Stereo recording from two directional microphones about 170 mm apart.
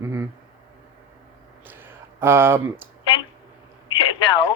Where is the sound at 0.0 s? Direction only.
15° right (ahead or behind).